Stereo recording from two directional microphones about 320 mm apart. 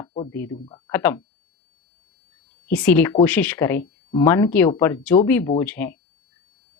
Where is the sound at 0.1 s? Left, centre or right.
Centre.